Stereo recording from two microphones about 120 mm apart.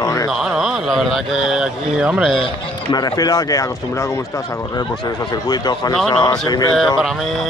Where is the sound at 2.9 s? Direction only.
35° left (ahead or behind).